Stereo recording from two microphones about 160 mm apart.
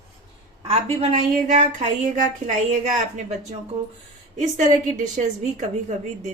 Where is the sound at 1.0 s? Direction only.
50° right (ahead or behind).